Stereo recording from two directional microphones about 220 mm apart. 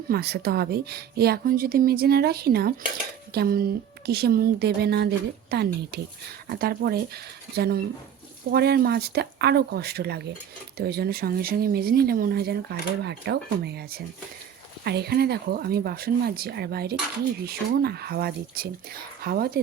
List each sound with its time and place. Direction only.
0.1 s a woman's voice: 45° right (ahead or behind)